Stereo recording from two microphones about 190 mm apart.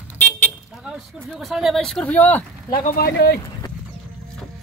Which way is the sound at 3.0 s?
55° left (ahead or behind).